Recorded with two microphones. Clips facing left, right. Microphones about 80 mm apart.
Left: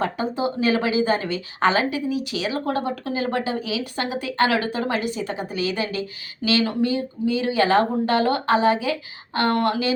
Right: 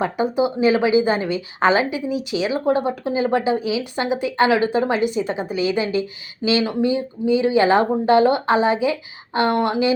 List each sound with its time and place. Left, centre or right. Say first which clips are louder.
0.0 s a woman's voice: right 4 dB; centre